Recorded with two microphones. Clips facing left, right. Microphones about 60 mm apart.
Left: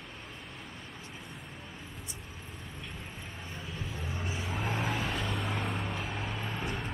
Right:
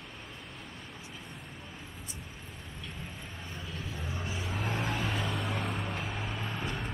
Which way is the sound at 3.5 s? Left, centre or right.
Centre.